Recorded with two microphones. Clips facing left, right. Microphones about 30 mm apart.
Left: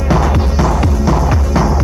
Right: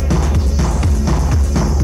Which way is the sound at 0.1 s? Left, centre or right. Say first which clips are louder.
Left 6 dB; centre.